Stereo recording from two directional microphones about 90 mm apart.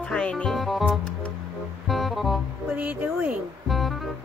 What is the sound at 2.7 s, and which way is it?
Speech, 20° right (ahead or behind).